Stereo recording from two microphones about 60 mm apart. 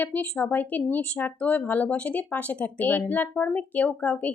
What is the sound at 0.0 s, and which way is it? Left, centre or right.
Speech, left.